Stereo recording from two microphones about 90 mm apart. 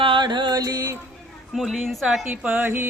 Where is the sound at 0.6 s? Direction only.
40° right (ahead or behind).